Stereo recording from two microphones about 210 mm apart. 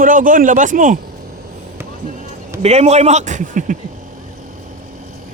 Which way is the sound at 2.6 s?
30° right (ahead or behind).